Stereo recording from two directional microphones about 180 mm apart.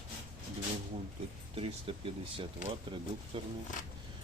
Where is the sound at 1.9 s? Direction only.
30° right (ahead or behind).